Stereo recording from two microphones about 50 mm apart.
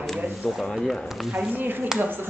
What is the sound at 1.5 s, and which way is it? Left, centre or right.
Speech, right.